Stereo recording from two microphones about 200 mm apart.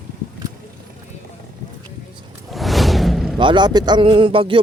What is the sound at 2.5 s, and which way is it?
Music, centre (ahead or behind).